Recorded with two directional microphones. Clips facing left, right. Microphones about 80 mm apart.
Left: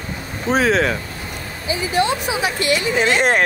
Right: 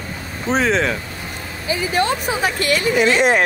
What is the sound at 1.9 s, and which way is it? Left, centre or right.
Speech, right.